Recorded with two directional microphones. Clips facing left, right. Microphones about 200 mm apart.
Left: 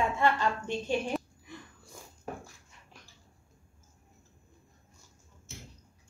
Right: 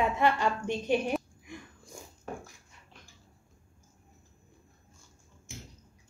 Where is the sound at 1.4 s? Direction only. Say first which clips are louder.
Right 2 dB; 15° right (ahead or behind).